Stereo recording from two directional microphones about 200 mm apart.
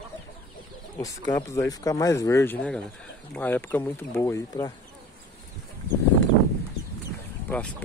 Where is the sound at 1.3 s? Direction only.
15° left (ahead or behind).